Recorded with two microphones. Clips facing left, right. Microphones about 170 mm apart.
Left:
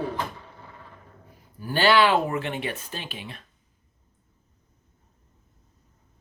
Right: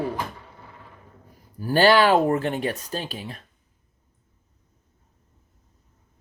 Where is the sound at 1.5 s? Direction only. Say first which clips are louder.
Right 3 dB; 40° right (ahead or behind).